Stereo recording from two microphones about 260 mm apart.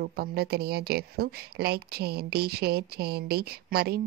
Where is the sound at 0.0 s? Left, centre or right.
Right.